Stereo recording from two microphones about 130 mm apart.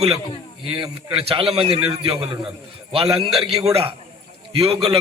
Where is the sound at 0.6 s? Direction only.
45° right (ahead or behind).